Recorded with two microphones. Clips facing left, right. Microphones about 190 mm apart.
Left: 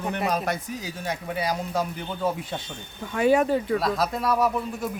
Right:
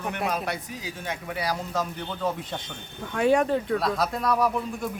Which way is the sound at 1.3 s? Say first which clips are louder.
Left 2 dB; 20° left (ahead or behind).